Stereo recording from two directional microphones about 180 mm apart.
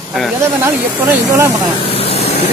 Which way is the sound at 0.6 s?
15° right (ahead or behind).